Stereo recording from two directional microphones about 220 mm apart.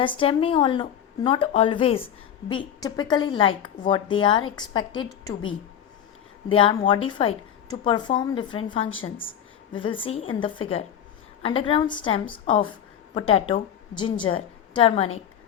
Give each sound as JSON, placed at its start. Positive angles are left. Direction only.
{"t": 0.0, "sound": "a woman's voice", "side_deg": 25}
{"t": 6.5, "sound": "a woman's voice", "side_deg": 25}